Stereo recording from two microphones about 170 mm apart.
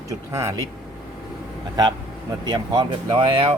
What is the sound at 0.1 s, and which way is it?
Speech, 15° right (ahead or behind).